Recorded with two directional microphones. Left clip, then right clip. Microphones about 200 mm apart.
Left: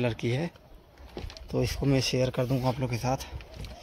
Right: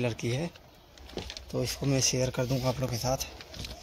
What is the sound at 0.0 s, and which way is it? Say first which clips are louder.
Speech: left 2 dB; 15° left (ahead or behind).